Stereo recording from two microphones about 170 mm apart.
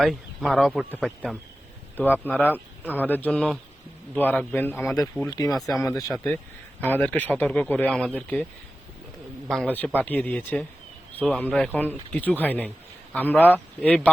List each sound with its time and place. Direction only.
0.0 s a man's voice: centre (ahead or behind)
5.3 s speech: 20° left (ahead or behind)
9.5 s speech: 5° left (ahead or behind)